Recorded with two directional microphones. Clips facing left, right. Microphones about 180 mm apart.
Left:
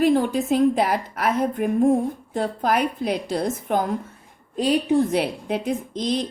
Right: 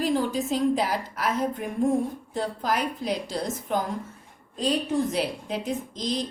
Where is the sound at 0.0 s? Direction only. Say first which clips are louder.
Left 6 dB; 55° left (ahead or behind).